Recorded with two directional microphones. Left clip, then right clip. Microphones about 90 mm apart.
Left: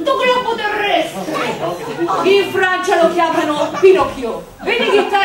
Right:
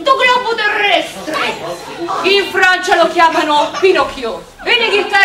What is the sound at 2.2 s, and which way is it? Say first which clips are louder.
Speech: right 3 dB; 35° right (ahead or behind).